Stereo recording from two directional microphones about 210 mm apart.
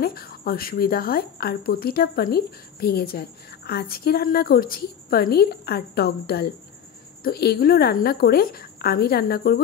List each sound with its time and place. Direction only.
0.0 s a woman's voice: 45° left (ahead or behind)